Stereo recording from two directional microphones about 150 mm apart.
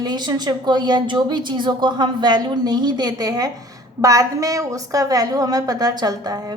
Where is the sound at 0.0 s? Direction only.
30° right (ahead or behind).